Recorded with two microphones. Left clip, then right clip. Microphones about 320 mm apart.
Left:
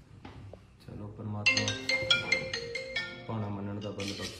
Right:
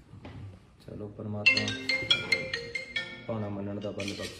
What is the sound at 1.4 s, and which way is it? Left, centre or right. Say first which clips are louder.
Music: right 3 dB; left.